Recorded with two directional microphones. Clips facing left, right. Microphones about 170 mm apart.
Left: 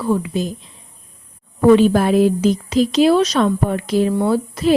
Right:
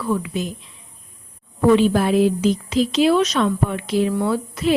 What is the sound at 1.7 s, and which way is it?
A woman's voice, 45° left (ahead or behind).